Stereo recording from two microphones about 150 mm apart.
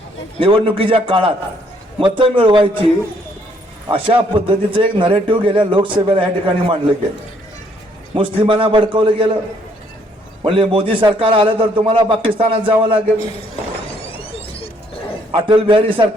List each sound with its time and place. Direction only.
0.3 s a man's voice: 35° right (ahead or behind)
3.9 s a man's voice: 35° right (ahead or behind)
8.1 s a man's voice: 35° right (ahead or behind)
10.4 s a man's voice: 35° right (ahead or behind)
14.0 s a sound: 40° left (ahead or behind)
15.3 s a man's voice: 35° right (ahead or behind)